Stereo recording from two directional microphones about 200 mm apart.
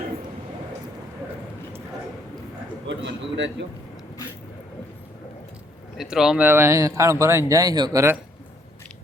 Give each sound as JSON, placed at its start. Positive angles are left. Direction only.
{"t": 2.8, "sound": "a man's voice", "side_deg": -65}
{"t": 6.0, "sound": "speech", "side_deg": 0}